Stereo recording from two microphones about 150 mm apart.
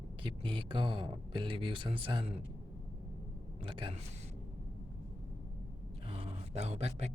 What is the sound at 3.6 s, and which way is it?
Speech, 35° right (ahead or behind).